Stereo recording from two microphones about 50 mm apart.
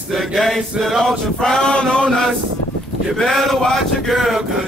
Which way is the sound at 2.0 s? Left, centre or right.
Centre.